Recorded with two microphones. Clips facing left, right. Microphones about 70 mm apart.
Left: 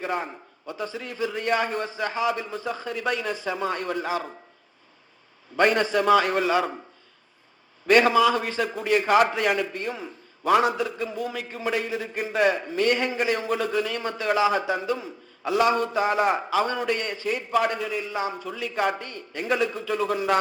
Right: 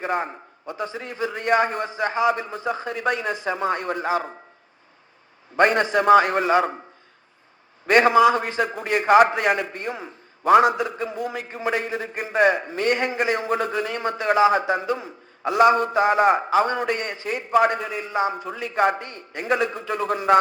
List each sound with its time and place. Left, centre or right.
0.0 s a man's voice: right
3.0 s a man's voice: right
5.5 s a man's voice: right
6.5 s a man's voice: right
7.9 s a man's voice: right
8.7 s a man's voice: right
12.3 s a man's voice: right
18.1 s a man's voice: right